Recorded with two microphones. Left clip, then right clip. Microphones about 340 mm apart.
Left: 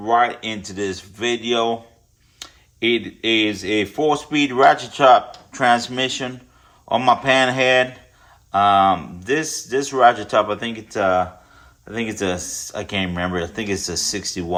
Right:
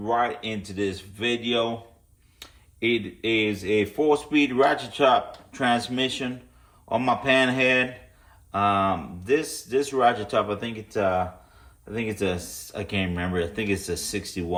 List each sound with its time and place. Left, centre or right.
0.0 s speech: left